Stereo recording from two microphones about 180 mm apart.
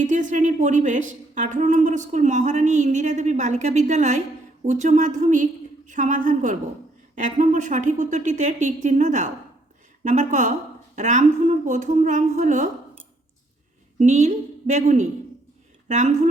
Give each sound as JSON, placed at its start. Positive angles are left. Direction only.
{"t": 0.0, "sound": "a woman's voice", "side_deg": -45}
{"t": 14.0, "sound": "a woman's voice", "side_deg": -40}